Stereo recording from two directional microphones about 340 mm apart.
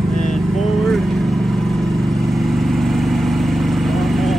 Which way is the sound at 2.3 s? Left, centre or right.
Centre.